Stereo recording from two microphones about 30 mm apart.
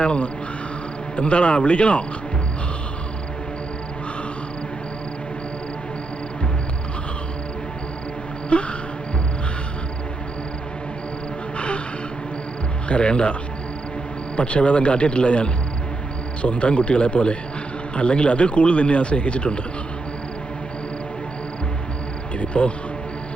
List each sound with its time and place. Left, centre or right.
0.0 s a man's voice: left
8.4 s a sound: left
11.5 s a sound: left
12.9 s a man's voice: left
14.3 s a man's voice: left
22.4 s cricket: left